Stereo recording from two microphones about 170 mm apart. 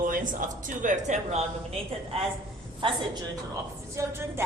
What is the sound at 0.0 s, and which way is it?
Speech, 50° right (ahead or behind).